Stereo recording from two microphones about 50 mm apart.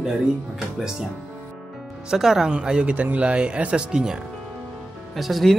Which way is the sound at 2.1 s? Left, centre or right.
Centre.